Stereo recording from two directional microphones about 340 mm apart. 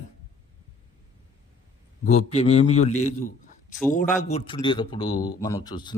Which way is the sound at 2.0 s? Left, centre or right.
Centre.